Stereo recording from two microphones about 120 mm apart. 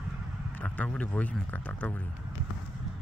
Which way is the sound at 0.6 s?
10° left (ahead or behind).